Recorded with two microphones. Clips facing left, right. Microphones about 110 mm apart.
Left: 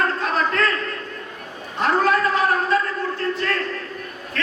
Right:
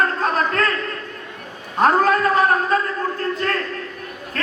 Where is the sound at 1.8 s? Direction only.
40° right (ahead or behind).